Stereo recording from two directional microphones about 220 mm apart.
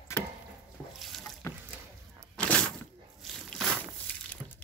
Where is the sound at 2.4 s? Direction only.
5° left (ahead or behind).